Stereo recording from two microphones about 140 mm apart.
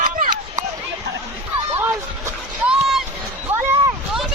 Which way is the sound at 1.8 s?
15° right (ahead or behind).